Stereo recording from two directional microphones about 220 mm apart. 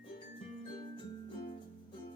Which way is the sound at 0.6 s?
20° left (ahead or behind).